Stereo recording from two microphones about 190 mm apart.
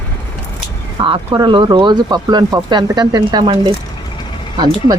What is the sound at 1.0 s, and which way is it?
Speech, 25° right (ahead or behind).